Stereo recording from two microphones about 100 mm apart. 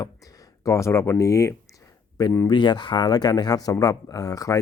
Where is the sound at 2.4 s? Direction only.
50° left (ahead or behind).